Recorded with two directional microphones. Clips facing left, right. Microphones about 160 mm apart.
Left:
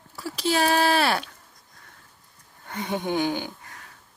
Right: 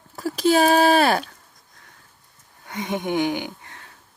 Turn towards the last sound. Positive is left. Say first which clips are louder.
# right 2 dB
turn(degrees=-20)  # may be behind; listen again after turning